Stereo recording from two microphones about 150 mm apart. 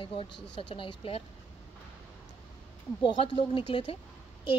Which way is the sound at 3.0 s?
35° left (ahead or behind).